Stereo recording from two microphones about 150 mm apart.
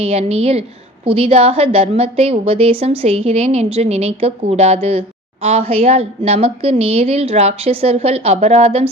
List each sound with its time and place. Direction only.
0.0 s a woman's voice: 40° right (ahead or behind)